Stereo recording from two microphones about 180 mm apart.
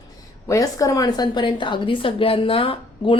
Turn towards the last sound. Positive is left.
turn(degrees=30)  # may be behind; listen again after turning